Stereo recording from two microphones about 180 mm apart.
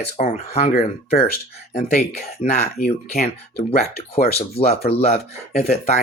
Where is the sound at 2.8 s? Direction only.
50° left (ahead or behind).